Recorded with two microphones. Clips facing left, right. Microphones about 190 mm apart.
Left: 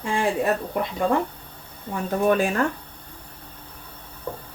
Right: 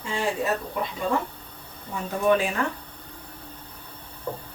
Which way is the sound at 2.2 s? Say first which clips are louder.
Left 1 dB; 45° left (ahead or behind).